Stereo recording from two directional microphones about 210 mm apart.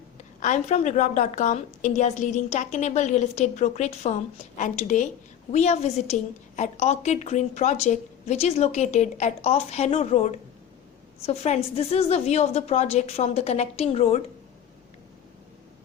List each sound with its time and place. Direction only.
0.3 s a woman's voice: 35° left (ahead or behind)